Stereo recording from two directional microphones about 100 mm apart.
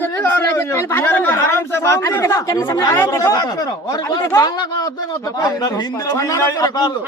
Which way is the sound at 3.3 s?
45° left (ahead or behind).